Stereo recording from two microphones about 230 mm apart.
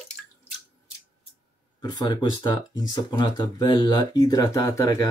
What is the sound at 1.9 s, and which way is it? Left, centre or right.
Speech, centre.